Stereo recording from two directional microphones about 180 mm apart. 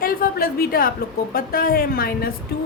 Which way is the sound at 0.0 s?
55° left (ahead or behind).